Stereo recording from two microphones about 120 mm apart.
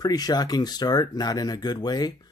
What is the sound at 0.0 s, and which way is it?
Speech, 30° left (ahead or behind).